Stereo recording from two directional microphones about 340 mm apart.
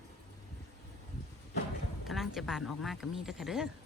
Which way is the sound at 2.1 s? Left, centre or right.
Centre.